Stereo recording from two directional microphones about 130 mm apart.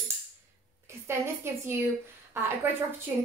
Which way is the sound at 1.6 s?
15° right (ahead or behind).